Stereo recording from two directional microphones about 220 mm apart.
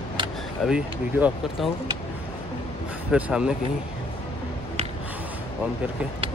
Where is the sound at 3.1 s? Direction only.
5° right (ahead or behind).